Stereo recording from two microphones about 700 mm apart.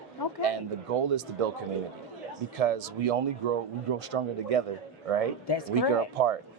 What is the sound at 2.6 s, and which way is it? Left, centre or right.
Speech, right.